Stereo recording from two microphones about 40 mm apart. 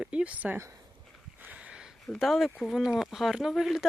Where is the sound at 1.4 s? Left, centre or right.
Right.